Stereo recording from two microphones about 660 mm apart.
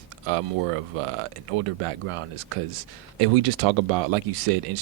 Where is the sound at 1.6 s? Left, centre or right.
Right.